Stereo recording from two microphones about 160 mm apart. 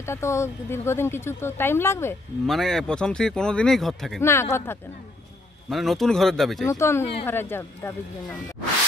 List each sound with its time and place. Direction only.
0.0 s speech: 15° left (ahead or behind)
2.4 s speech: centre (ahead or behind)
4.2 s speech: 15° left (ahead or behind)
5.7 s speech: centre (ahead or behind)
6.6 s speech: 15° left (ahead or behind)